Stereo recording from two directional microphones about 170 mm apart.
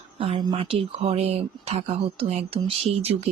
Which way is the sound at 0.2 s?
30° right (ahead or behind).